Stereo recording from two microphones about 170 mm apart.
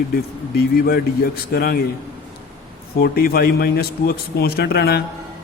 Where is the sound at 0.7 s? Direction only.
60° left (ahead or behind).